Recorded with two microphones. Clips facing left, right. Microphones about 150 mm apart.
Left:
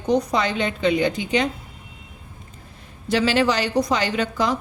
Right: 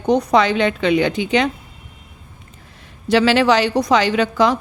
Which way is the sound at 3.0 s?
85° right.